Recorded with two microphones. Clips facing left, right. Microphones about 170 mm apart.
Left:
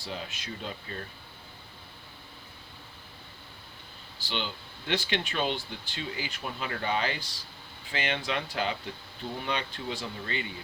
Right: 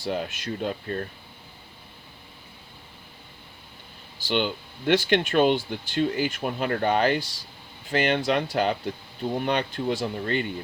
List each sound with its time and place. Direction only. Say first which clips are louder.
0.0 s speech: right 9 dB; 55° right (ahead or behind)
4.3 s speech: right 10 dB; 55° right (ahead or behind)